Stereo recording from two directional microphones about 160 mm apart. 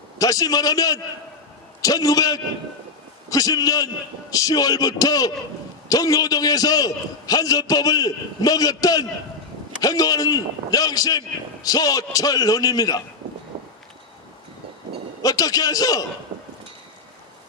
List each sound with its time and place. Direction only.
0.2 s a man's voice: 20° left (ahead or behind)
15.2 s a man's voice: 20° left (ahead or behind)